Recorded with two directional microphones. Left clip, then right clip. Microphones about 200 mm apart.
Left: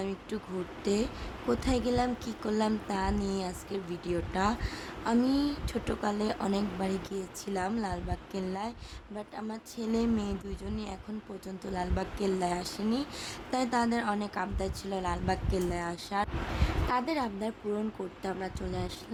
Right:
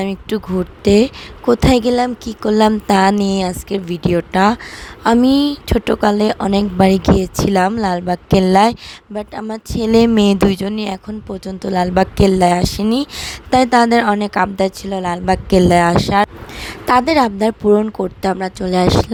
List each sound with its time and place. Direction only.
0.0 s a woman's voice: 45° right (ahead or behind)